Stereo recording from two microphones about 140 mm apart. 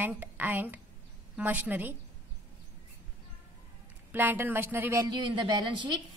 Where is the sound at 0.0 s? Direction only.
15° right (ahead or behind).